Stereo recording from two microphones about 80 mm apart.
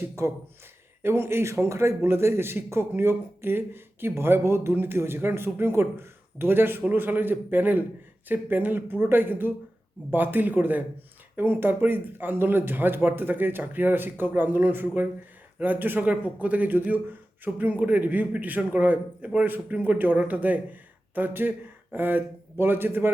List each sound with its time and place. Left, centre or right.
0.2 s speech: right